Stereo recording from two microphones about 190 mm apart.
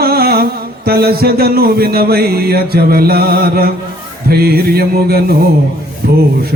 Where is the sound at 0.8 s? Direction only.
55° right (ahead or behind).